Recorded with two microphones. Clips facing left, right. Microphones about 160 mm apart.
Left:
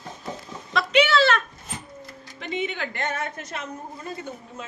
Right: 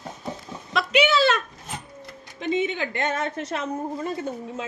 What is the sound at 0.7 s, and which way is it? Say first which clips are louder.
Speech: even; 5° right (ahead or behind).